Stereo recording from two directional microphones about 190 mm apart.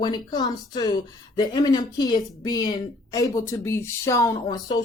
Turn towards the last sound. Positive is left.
turn(degrees=20)  # may be behind; listen again after turning